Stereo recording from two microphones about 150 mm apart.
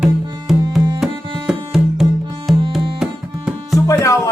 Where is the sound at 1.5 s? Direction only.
Centre (ahead or behind).